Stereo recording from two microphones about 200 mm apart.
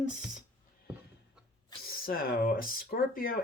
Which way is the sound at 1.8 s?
50° left (ahead or behind).